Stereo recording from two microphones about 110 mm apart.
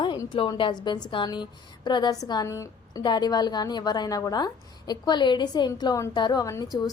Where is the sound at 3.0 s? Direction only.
40° left (ahead or behind).